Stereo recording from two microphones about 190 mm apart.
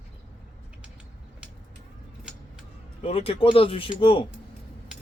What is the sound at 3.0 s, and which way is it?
Speech, 30° left (ahead or behind).